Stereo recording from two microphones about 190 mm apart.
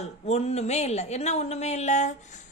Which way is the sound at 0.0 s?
35° left (ahead or behind).